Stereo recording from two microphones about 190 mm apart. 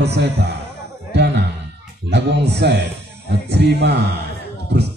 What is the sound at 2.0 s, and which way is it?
A man's voice, 65° right (ahead or behind).